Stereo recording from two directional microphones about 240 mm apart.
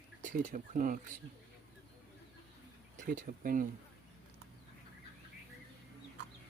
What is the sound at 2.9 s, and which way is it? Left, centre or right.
Speech, right.